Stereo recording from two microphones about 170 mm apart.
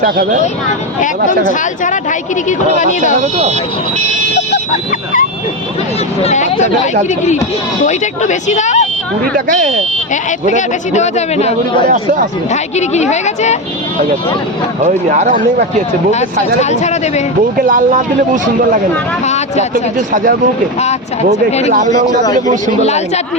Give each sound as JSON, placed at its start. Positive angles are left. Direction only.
{"t": 0.0, "sound": "speech", "side_deg": -55}
{"t": 1.8, "sound": "speech", "side_deg": 50}
{"t": 6.2, "sound": "speech", "side_deg": 45}
{"t": 7.9, "sound": "speech", "side_deg": 45}
{"t": 9.5, "sound": "speech", "side_deg": -50}
{"t": 10.4, "sound": "a man's voice", "side_deg": 45}
{"t": 14.8, "sound": "speech", "side_deg": -50}
{"t": 16.6, "sound": "a man's voice", "side_deg": 40}
{"t": 17.7, "sound": "speech", "side_deg": -50}
{"t": 19.2, "sound": "a man's voice", "side_deg": 40}
{"t": 19.7, "sound": "speech", "side_deg": -55}
{"t": 21.7, "sound": "speech", "side_deg": -45}
{"t": 22.8, "sound": "a man's voice", "side_deg": 40}